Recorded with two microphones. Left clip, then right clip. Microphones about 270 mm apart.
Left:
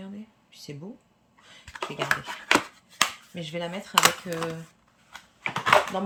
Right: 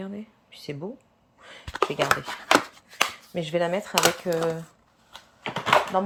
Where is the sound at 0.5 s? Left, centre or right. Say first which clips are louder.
Right 6 dB; centre.